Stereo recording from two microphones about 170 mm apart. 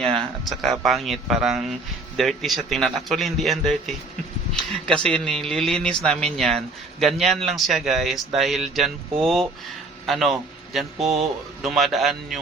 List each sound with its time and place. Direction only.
0.0 s a man's voice: 5° left (ahead or behind)